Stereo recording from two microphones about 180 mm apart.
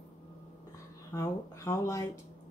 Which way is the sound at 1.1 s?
15° left (ahead or behind).